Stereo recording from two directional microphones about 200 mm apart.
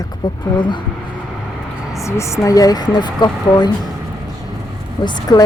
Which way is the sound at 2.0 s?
15° left (ahead or behind).